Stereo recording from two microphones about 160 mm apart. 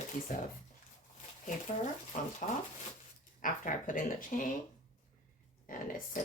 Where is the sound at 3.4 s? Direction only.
55° left (ahead or behind).